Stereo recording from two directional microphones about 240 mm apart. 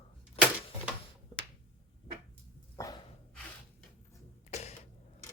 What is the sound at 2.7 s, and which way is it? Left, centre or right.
Dog, centre.